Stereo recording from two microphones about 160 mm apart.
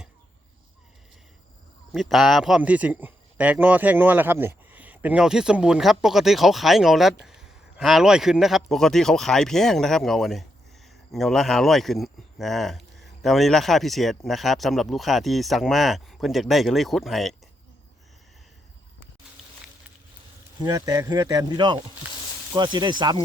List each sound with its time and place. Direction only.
1.9 s a man's voice: centre (ahead or behind)
20.7 s speech: 20° right (ahead or behind)